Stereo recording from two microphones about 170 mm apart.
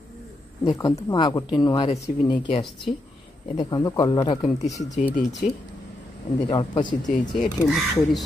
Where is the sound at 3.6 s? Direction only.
20° left (ahead or behind).